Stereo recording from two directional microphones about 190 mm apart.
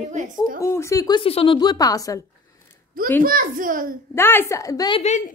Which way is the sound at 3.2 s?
45° right (ahead or behind).